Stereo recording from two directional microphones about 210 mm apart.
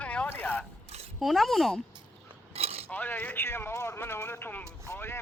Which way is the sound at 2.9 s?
10° left (ahead or behind).